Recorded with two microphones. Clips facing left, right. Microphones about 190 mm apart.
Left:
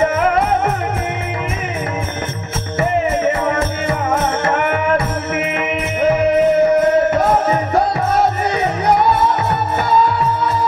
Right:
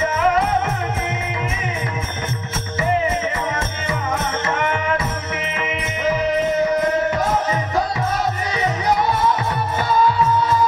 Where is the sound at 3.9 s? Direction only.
60° left (ahead or behind).